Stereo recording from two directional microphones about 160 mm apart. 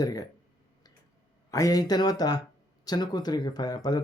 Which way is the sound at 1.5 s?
20° left (ahead or behind).